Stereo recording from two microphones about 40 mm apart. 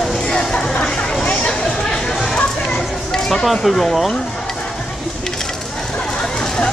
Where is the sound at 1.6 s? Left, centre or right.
Centre.